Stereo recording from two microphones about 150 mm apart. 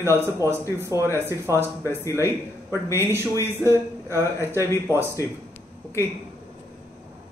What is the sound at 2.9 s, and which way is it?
A man's voice, 15° right (ahead or behind).